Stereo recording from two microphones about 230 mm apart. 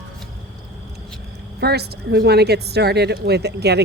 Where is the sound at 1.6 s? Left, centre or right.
Right.